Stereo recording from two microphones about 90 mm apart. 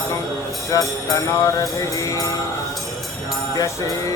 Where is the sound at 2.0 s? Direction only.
40° left (ahead or behind).